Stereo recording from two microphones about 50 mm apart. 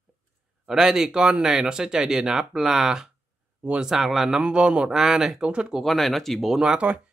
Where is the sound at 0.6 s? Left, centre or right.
Centre.